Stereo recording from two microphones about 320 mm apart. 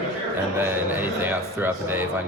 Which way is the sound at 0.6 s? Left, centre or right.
Centre.